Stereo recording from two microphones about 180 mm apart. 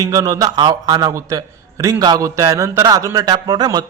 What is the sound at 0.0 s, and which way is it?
A man's voice, 20° right (ahead or behind).